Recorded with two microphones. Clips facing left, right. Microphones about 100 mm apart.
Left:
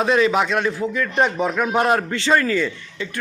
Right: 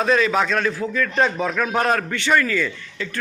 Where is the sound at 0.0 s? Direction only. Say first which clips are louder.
Left 1 dB; 20° left (ahead or behind).